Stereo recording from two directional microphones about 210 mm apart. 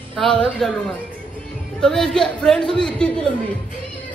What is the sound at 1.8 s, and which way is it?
A man's voice, 5° left (ahead or behind).